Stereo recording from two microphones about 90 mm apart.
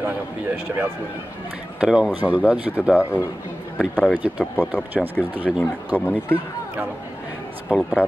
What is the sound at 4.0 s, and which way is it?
Speech, 15° right (ahead or behind).